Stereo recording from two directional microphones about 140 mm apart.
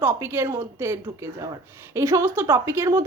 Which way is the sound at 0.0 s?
15° right (ahead or behind).